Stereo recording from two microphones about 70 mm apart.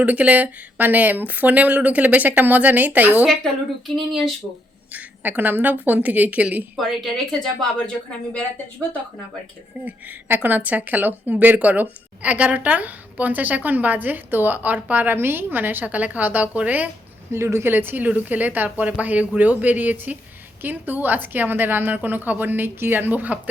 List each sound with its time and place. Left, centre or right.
0.0 s a woman's voice: right
3.2 s speech: centre
4.9 s a woman's voice: right
6.7 s speech: centre
9.8 s a woman's voice: right
17.3 s a woman's voice: right